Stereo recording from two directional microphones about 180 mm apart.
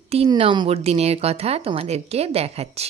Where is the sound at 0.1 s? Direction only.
30° right (ahead or behind).